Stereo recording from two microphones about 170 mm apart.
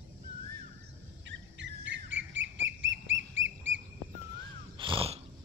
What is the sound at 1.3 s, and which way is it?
Bird, 90° right.